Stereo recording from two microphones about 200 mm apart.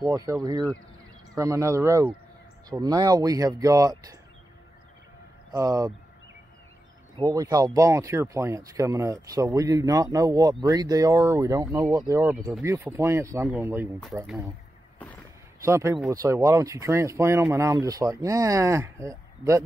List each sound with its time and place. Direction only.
0.0 s speech: 20° right (ahead or behind)
5.5 s speech: 15° right (ahead or behind)
7.2 s speech: 20° right (ahead or behind)
15.6 s speech: 15° right (ahead or behind)